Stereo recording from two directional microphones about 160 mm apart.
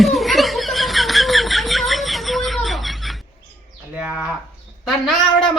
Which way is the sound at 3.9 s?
5° right (ahead or behind).